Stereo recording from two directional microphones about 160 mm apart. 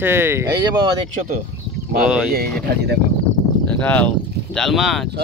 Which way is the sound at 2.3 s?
85° right.